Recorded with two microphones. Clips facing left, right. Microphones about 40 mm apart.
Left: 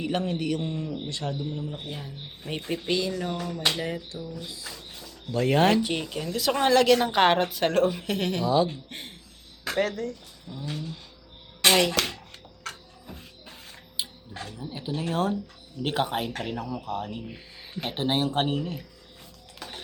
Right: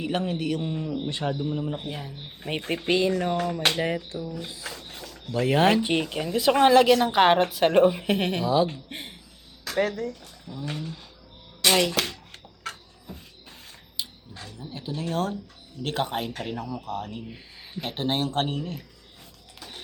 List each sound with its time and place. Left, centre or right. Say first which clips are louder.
0.0 s a man's voice: even; centre
1.0 s speech: right 4 dB; right
1.8 s a man's voice: right 2 dB; centre
2.4 s speech: right 2 dB; right
4.3 s a sound: right 3 dB; right
5.3 s speech: right 1 dB; centre
5.8 s speech: right 4 dB; right
6.9 s speech: right 2 dB; centre
7.7 s speech: right 4 dB; right
8.4 s a man's voice: even; centre
11.7 s speech: even; centre
14.6 s speech: left 1 dB; centre
19.5 s music: left 2 dB; left